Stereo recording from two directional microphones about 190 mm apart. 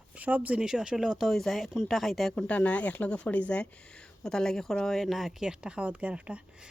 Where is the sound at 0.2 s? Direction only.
10° right (ahead or behind).